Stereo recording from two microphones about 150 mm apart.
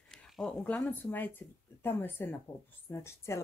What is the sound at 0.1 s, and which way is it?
Speech, centre (ahead or behind).